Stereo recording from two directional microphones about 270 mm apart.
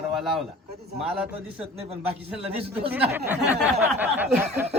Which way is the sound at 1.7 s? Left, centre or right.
Right.